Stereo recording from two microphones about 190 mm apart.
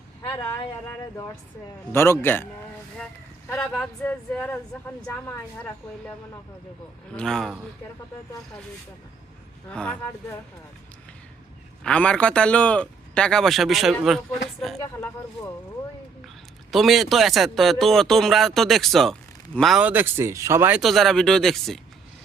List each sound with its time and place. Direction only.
0.2 s speech: 15° left (ahead or behind)
1.9 s speech: 10° left (ahead or behind)
3.5 s speech: 5° left (ahead or behind)
7.2 s a man's voice: centre (ahead or behind)
9.6 s a man's voice: 5° left (ahead or behind)
11.8 s a man's voice: 5° left (ahead or behind)
16.7 s a man's voice: centre (ahead or behind)